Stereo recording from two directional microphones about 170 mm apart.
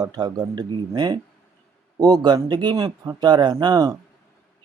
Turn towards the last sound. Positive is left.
turn(degrees=-25)  # may be behind; listen again after turning